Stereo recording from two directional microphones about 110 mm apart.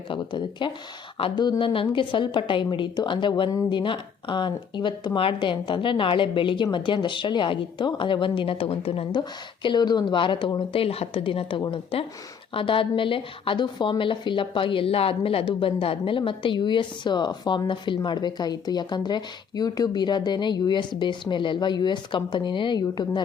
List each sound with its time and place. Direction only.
0.1 s a woman's voice: 45° left (ahead or behind)
9.6 s a woman's voice: 40° left (ahead or behind)